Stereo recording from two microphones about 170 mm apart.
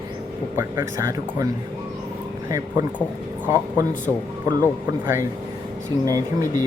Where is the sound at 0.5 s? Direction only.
15° right (ahead or behind).